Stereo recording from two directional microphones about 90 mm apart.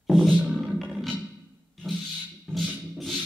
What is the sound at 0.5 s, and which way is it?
Music, centre (ahead or behind).